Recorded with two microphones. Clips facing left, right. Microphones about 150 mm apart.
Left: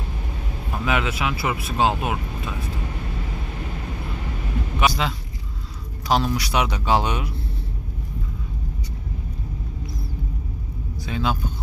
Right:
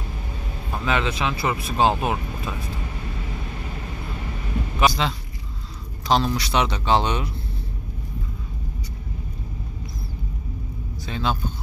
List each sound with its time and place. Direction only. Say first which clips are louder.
0.8 s speech: even; 5° left (ahead or behind)
4.7 s vehicle: right 1 dB; 5° left (ahead or behind)
6.0 s speech: even; 10° left (ahead or behind)
11.1 s speech: left 1 dB; 5° left (ahead or behind)